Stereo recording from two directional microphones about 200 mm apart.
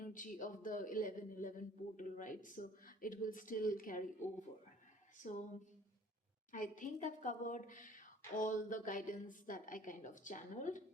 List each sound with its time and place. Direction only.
0.0 s a man's voice: 40° left (ahead or behind)
6.5 s a man's voice: 40° left (ahead or behind)